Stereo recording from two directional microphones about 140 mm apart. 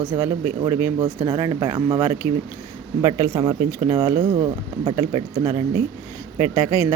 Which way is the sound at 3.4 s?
25° right (ahead or behind).